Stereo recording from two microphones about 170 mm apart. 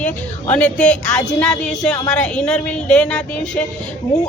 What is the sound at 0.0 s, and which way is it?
A woman's voice, 10° left (ahead or behind).